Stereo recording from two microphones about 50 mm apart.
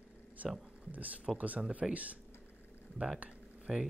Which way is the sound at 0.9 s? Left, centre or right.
Right.